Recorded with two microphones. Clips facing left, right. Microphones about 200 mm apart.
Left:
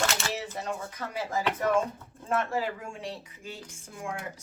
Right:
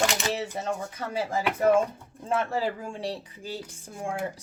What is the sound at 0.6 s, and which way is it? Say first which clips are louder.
A woman's voice: right 3 dB; 30° right (ahead or behind).